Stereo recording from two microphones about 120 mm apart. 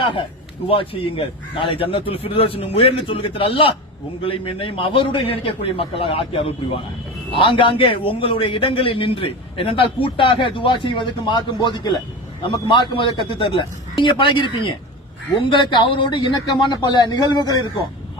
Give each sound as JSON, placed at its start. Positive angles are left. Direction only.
{"t": 0.0, "sound": "a man's voice", "side_deg": 45}